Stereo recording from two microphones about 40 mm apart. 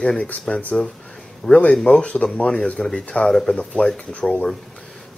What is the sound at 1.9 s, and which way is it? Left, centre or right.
Speech, left.